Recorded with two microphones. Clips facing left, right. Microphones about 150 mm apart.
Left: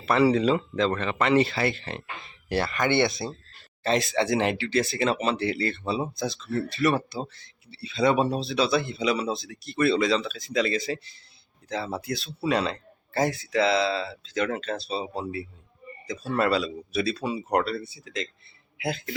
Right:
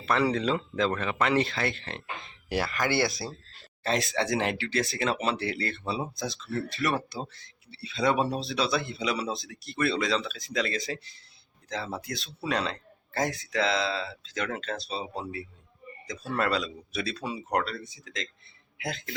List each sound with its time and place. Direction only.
0.0 s a man's voice: 5° left (ahead or behind)